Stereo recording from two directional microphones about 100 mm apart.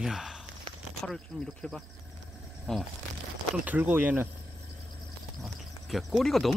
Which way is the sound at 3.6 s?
15° right (ahead or behind).